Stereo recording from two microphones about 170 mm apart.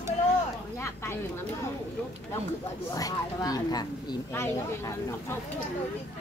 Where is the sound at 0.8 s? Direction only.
15° left (ahead or behind).